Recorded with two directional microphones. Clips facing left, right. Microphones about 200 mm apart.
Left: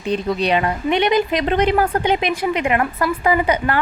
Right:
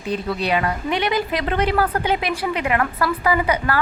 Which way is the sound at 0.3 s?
25° left (ahead or behind).